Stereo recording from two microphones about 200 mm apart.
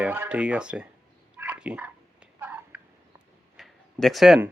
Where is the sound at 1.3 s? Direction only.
5° right (ahead or behind).